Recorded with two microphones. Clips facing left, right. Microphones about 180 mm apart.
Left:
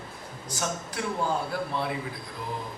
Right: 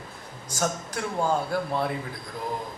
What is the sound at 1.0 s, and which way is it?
Speech, 45° right (ahead or behind).